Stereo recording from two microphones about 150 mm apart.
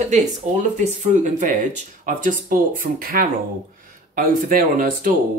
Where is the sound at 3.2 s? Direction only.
80° right.